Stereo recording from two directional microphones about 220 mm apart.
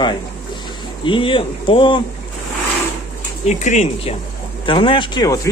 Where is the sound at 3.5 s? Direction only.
30° left (ahead or behind).